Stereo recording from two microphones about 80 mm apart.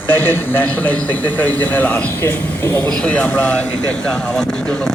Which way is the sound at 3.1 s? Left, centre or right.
Centre.